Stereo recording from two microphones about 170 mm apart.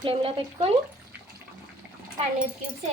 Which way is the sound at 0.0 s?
30° right (ahead or behind).